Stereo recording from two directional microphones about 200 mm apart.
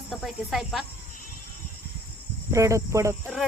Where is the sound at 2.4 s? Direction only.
15° right (ahead or behind).